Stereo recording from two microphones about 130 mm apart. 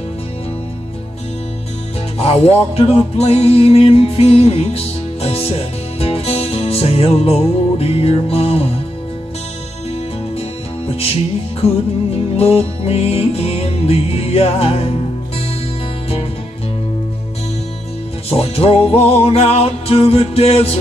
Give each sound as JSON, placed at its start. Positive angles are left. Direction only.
{"t": 2.1, "sound": "music", "side_deg": 50}
{"t": 12.4, "sound": "music", "side_deg": 50}
{"t": 18.3, "sound": "music", "side_deg": 50}